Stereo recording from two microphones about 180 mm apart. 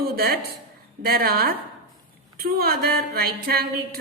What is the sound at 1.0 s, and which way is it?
A woman's voice, 60° right (ahead or behind).